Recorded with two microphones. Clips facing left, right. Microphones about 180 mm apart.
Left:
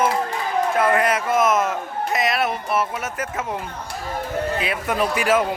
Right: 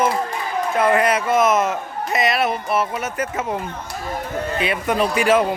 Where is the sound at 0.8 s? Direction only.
Centre (ahead or behind).